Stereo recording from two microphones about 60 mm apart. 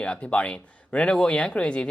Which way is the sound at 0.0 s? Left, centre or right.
Centre.